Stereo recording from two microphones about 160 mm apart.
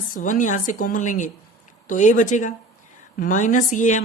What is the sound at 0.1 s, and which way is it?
Speech, 55° left (ahead or behind).